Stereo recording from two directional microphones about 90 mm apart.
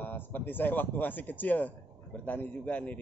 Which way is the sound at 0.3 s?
20° left (ahead or behind).